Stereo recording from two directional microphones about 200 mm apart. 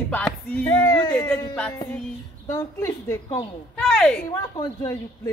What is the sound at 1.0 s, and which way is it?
Speech, 20° left (ahead or behind).